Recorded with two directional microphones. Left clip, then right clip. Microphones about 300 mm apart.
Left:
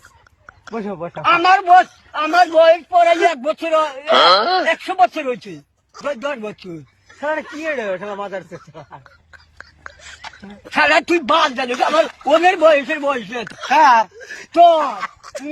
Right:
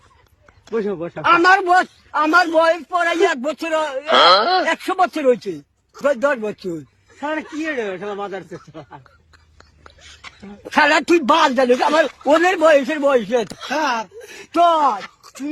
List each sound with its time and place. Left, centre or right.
0.6 s speech: centre
1.3 s a man's voice: centre
4.0 s speech: centre
4.6 s a man's voice: centre
7.2 s speech: centre
9.6 s a sound: centre
10.7 s a man's voice: centre
13.4 s speech: centre
14.5 s a man's voice: centre
14.9 s a sound: centre